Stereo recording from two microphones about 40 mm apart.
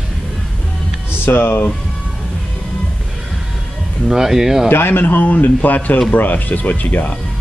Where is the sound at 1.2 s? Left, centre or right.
Left.